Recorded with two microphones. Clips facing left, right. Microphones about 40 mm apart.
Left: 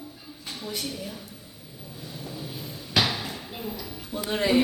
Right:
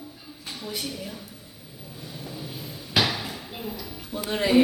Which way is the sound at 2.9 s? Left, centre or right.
Centre.